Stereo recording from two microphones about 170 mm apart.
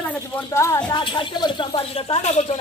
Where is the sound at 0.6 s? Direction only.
15° left (ahead or behind).